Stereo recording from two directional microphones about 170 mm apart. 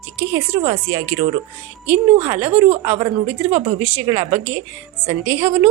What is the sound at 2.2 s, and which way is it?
A woman's voice, 10° right (ahead or behind).